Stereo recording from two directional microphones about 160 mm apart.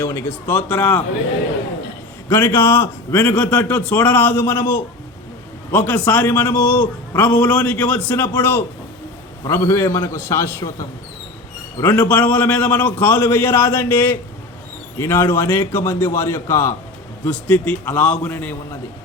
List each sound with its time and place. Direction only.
0.0 s a man's voice: 15° left (ahead or behind)
2.3 s a man's voice: 15° left (ahead or behind)